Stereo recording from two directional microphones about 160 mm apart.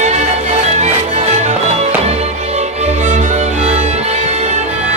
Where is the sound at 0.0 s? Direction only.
45° right (ahead or behind).